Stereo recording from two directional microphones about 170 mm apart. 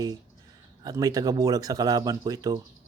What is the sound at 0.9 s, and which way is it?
Speech, 20° right (ahead or behind).